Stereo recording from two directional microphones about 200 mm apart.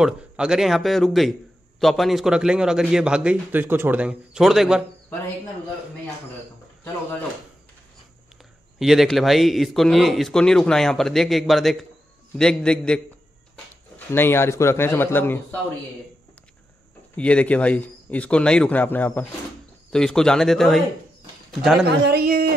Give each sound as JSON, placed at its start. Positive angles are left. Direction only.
{"t": 0.0, "sound": "a man's voice", "side_deg": -5}
{"t": 8.7, "sound": "a man's voice", "side_deg": 0}
{"t": 17.2, "sound": "a man's voice", "side_deg": 5}
{"t": 22.0, "sound": "speech", "side_deg": -50}